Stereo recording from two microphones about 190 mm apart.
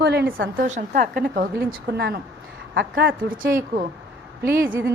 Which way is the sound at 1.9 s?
55° right (ahead or behind).